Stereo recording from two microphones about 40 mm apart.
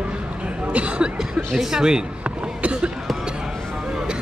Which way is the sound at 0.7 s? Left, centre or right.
Right.